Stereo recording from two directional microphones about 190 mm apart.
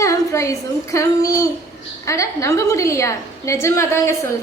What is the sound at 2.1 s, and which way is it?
A woman's voice, 15° left (ahead or behind).